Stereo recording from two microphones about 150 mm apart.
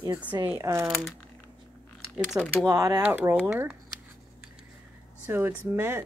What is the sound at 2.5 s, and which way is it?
Speech, 20° right (ahead or behind).